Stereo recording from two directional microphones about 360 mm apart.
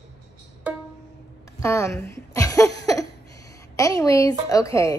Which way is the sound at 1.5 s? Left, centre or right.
Centre.